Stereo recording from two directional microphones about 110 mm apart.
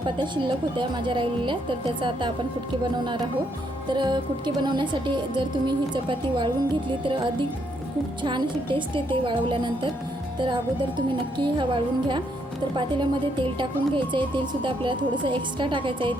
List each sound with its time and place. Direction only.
0.0 s speech: 45° right (ahead or behind)
3.9 s speech: 45° right (ahead or behind)